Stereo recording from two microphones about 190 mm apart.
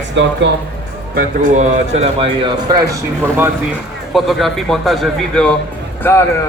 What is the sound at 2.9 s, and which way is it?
Speech, 10° right (ahead or behind).